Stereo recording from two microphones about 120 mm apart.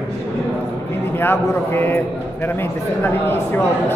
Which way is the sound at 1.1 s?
20° left (ahead or behind).